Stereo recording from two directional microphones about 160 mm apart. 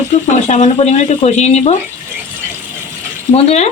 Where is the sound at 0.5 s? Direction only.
45° left (ahead or behind).